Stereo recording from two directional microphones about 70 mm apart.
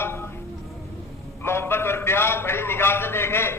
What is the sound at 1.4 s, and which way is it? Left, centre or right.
A man's voice, left.